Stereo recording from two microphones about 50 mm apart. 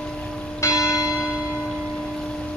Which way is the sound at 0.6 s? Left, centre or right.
Left.